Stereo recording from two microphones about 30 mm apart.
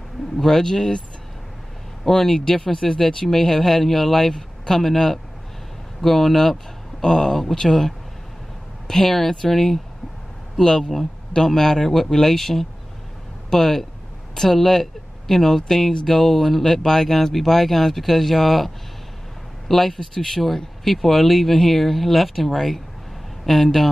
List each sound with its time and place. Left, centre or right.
0.4 s speech: centre
2.0 s speech: centre
10.6 s speech: centre
19.7 s speech: centre